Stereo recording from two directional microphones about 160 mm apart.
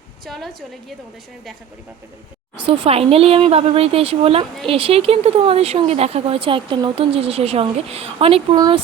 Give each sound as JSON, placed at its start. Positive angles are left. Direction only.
{"t": 0.3, "sound": "a woman's voice", "side_deg": 0}
{"t": 2.6, "sound": "speech", "side_deg": -35}
{"t": 8.5, "sound": "speech", "side_deg": -25}